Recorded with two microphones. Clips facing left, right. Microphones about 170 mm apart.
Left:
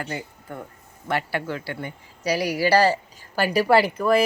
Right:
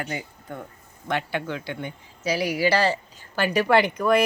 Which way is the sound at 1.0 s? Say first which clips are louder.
Left 1 dB; 5° left (ahead or behind).